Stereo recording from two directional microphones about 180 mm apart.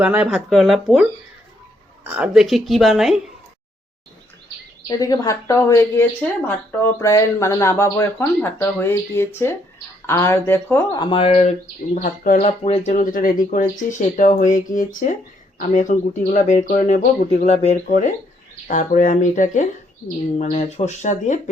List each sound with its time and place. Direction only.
0.0 s a woman's voice: 5° right (ahead or behind)
2.0 s a woman's voice: 5° right (ahead or behind)
4.9 s speech: 20° left (ahead or behind)
10.9 s speech: 25° left (ahead or behind)
11.9 s speech: 45° left (ahead or behind)
17.8 s speech: 45° left (ahead or behind)